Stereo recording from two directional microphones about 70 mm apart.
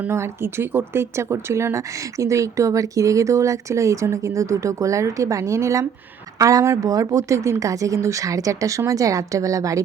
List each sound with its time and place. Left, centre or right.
0.1 s speech: right